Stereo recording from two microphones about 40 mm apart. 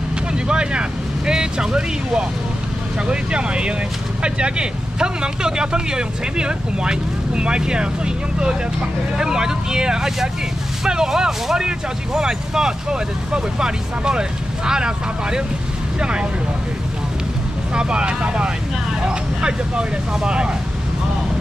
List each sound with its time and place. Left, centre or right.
0.3 s vehicle: right
3.1 s speech: right
17.7 s speech: right